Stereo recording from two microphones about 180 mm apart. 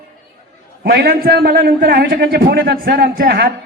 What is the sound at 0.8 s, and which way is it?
A man's voice, 60° right (ahead or behind).